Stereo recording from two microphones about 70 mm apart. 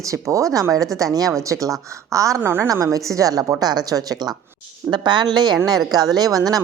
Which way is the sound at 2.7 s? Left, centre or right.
Right.